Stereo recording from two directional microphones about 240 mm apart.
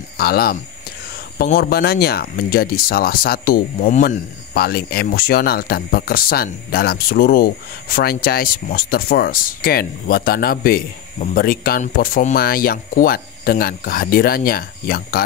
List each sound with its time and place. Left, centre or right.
0.2 s speech: left